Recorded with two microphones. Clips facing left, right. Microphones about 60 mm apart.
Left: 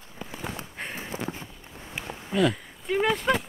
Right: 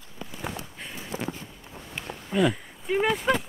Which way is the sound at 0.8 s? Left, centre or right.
Left.